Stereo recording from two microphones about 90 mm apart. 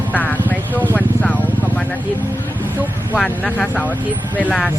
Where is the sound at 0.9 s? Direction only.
15° left (ahead or behind).